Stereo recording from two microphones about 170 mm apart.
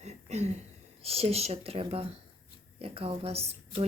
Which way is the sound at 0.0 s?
40° right (ahead or behind).